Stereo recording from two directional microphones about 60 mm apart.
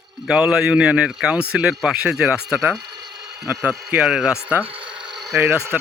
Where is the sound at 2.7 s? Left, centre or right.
Right.